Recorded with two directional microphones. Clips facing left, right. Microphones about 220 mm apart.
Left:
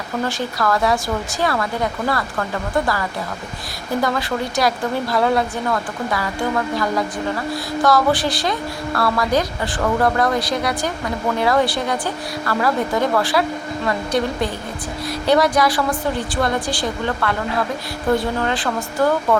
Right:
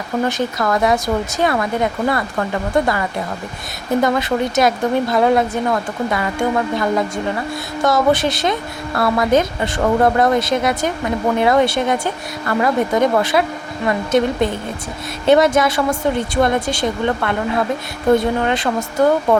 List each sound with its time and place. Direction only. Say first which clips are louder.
0.3 s speech: right 2 dB; 20° right (ahead or behind)
7.8 s speech: right 2 dB; 20° right (ahead or behind)